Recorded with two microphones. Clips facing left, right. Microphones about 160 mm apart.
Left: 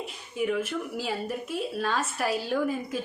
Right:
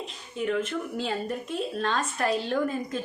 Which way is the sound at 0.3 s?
10° left (ahead or behind).